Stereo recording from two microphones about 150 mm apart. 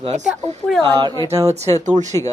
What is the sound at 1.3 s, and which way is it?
Speech, 20° right (ahead or behind).